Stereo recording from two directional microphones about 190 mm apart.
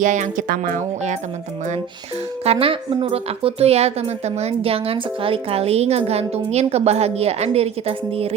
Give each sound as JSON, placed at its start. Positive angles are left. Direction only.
{"t": 0.0, "sound": "a woman's voice", "side_deg": -40}
{"t": 2.4, "sound": "a woman's voice", "side_deg": -30}